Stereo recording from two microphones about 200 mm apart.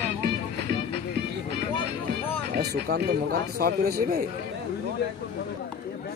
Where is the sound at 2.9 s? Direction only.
50° right (ahead or behind).